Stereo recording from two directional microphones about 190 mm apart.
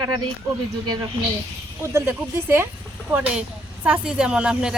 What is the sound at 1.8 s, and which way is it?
A woman's voice, 15° right (ahead or behind).